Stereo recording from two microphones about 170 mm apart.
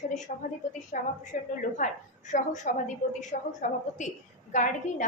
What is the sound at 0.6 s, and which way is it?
Speech, 45° left (ahead or behind).